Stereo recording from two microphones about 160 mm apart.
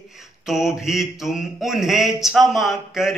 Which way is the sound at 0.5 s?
Centre (ahead or behind).